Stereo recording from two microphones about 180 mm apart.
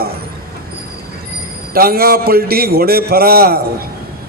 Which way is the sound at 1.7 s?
55° right (ahead or behind).